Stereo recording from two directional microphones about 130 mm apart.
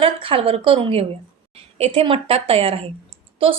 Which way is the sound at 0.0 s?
45° right (ahead or behind).